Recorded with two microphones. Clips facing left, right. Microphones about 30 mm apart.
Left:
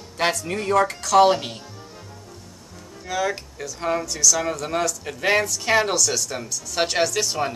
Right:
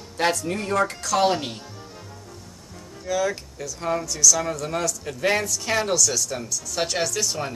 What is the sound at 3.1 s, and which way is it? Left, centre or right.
Speech, centre.